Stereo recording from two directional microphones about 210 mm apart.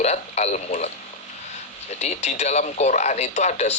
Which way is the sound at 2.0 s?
30° left (ahead or behind).